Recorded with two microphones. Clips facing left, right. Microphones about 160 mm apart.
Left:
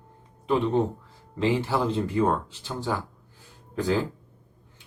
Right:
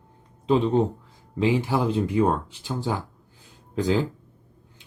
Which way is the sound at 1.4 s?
15° right (ahead or behind).